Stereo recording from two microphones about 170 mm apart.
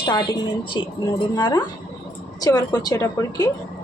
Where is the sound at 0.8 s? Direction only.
25° left (ahead or behind).